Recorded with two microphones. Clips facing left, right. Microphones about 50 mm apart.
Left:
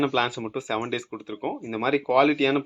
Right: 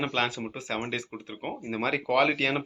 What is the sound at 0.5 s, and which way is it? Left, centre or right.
Speech, centre.